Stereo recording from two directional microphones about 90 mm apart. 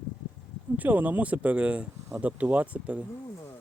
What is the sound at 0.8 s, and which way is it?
Speech, 20° right (ahead or behind).